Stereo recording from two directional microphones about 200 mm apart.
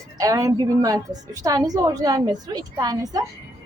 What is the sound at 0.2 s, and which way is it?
A woman's voice, 15° right (ahead or behind).